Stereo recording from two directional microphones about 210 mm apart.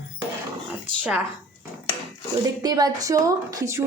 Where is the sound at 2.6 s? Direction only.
20° right (ahead or behind).